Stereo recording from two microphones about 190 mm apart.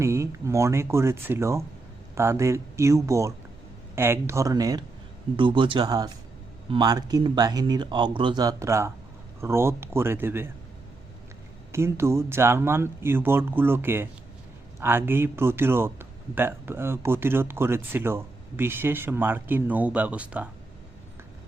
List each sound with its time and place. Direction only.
0.0 s speech: 15° right (ahead or behind)
11.7 s speech: 15° right (ahead or behind)